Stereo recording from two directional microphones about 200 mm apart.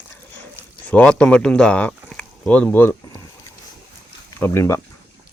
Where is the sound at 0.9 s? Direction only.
5° left (ahead or behind).